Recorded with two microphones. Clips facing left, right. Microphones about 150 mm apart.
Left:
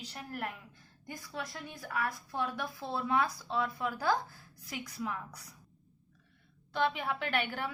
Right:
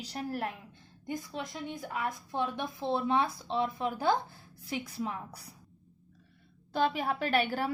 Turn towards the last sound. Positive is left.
turn(degrees=-35)  # may be behind; listen again after turning